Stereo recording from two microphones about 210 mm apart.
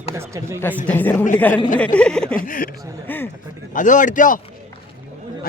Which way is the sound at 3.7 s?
35° left (ahead or behind).